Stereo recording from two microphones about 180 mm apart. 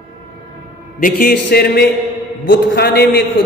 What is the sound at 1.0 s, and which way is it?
A man's voice, 55° left (ahead or behind).